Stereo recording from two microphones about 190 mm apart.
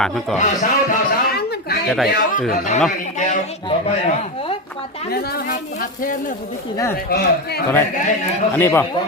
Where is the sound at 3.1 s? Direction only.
40° left (ahead or behind).